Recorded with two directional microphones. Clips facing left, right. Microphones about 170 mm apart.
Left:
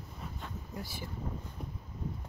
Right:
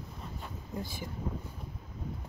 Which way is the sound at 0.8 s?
15° right (ahead or behind).